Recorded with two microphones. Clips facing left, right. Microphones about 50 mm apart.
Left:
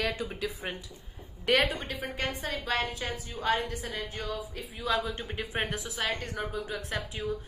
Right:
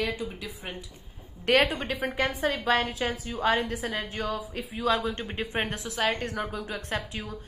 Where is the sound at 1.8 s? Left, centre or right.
Centre.